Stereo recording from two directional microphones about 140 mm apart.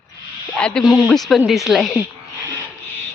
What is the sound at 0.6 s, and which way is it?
A man's voice, 5° left (ahead or behind).